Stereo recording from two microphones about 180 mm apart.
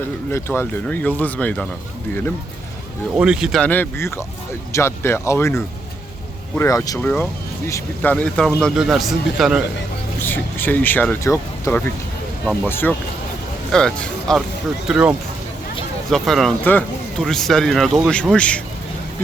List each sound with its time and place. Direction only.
0.3 s speech: 15° left (ahead or behind)
3.2 s speech: 5° right (ahead or behind)
10.2 s speech: 10° left (ahead or behind)